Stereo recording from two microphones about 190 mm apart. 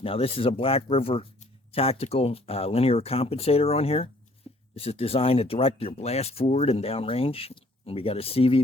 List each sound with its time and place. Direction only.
0.0 s speech: 30° left (ahead or behind)